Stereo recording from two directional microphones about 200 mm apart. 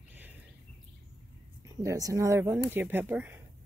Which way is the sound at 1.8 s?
15° right (ahead or behind).